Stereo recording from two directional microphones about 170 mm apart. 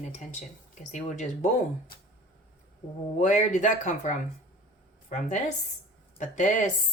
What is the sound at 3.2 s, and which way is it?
A woman's voice, 45° left (ahead or behind).